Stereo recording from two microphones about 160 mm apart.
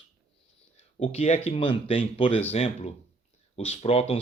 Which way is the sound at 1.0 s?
40° left (ahead or behind).